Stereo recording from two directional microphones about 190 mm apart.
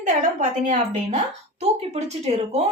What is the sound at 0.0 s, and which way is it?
A woman's voice, 40° right (ahead or behind).